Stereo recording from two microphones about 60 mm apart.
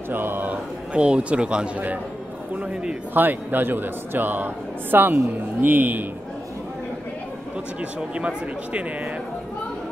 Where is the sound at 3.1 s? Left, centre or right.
Right.